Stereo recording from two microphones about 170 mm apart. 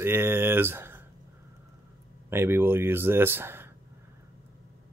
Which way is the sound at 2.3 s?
15° right (ahead or behind).